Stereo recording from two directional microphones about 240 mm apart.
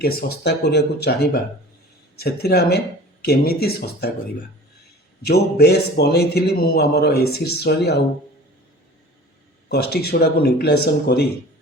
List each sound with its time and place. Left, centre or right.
0.0 s speech: left
5.2 s speech: left
9.6 s speech: left